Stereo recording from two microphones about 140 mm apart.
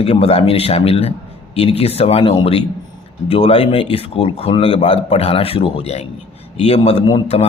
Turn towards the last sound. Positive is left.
turn(degrees=45)  # may be behind; listen again after turning